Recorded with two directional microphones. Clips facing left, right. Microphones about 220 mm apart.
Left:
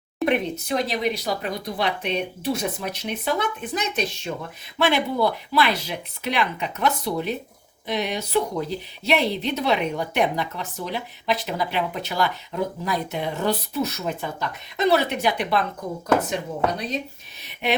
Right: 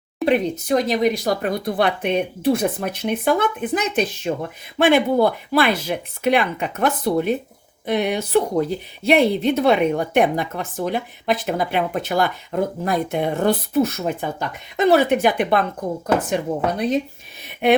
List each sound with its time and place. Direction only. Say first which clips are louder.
0.3 s speech: right 5 dB; 45° right (ahead or behind)
16.7 s speech: right 8 dB; 55° right (ahead or behind)